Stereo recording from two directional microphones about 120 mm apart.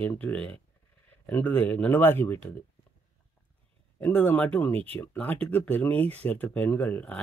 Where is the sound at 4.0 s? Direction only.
15° left (ahead or behind).